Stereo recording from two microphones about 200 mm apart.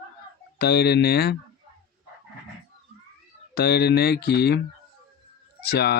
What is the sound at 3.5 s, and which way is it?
Speech, 55° left (ahead or behind).